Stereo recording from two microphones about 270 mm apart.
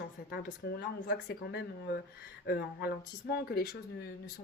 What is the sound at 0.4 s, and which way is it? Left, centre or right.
Speech, left.